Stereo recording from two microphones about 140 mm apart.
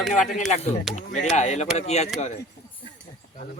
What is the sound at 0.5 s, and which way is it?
Speech, 50° left (ahead or behind).